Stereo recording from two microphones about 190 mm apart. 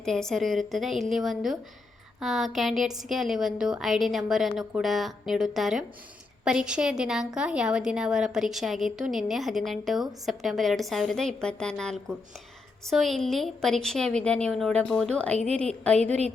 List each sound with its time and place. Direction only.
0.0 s a woman's voice: centre (ahead or behind)
16.0 s a woman's voice: 35° right (ahead or behind)